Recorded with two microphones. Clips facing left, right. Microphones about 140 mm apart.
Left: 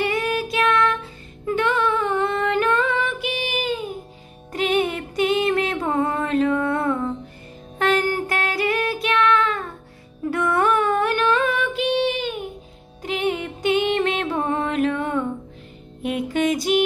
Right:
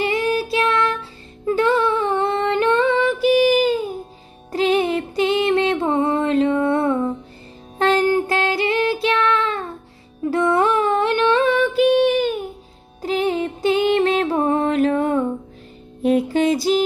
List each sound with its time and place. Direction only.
0.0 s music: 30° right (ahead or behind)
7.8 s child singing: 30° right (ahead or behind)
10.3 s music: 25° right (ahead or behind)
11.9 s child singing: 45° right (ahead or behind)
13.0 s music: 35° right (ahead or behind)